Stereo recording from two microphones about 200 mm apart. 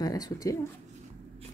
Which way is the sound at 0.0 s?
20° left (ahead or behind).